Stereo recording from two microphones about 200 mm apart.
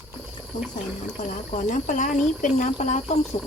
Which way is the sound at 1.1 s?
35° left (ahead or behind).